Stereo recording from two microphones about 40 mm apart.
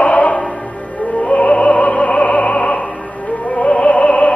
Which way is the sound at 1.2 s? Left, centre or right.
Left.